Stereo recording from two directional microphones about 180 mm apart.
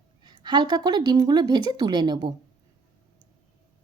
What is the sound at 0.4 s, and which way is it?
Speech, 25° right (ahead or behind).